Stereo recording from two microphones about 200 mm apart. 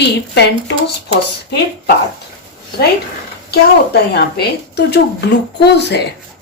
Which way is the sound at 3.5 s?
55° left (ahead or behind).